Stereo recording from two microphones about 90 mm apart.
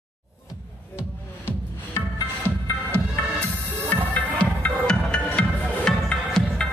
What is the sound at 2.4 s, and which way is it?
Music, 20° left (ahead or behind).